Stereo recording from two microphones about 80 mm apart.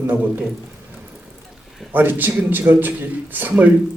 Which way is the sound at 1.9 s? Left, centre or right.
Right.